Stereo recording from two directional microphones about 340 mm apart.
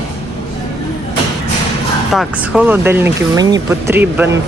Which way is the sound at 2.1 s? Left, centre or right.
Centre.